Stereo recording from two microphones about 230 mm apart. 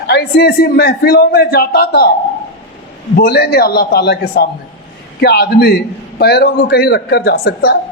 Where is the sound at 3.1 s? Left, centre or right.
Left.